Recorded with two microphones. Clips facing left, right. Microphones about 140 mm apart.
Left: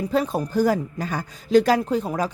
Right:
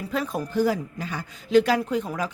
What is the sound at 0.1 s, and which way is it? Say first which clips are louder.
Speech: left 3 dB; 35° left (ahead or behind).